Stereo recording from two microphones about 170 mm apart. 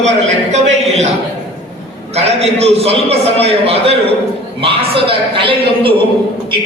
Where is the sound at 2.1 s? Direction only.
40° right (ahead or behind).